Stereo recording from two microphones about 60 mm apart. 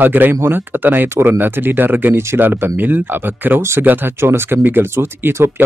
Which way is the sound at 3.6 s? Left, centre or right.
Right.